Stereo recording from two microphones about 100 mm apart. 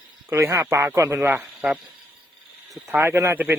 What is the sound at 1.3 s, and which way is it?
Speech, 5° right (ahead or behind).